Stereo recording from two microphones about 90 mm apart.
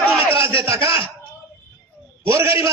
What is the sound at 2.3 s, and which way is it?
Speech, 30° right (ahead or behind).